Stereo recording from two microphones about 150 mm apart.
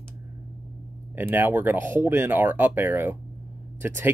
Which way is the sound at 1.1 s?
15° right (ahead or behind).